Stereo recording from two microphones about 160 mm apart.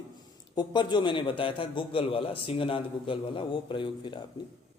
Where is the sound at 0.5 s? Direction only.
30° left (ahead or behind).